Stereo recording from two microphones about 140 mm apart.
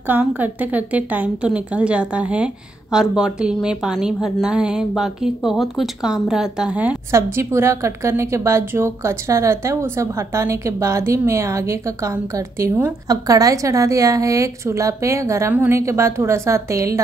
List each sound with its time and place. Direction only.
0.0 s a woman's voice: 15° right (ahead or behind)
7.3 s a woman's voice: 20° right (ahead or behind)